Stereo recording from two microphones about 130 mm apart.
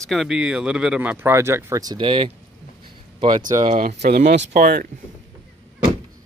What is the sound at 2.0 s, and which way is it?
Speech, 40° right (ahead or behind).